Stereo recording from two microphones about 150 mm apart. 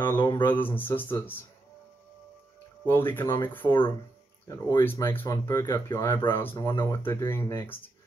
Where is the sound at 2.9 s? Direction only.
15° left (ahead or behind).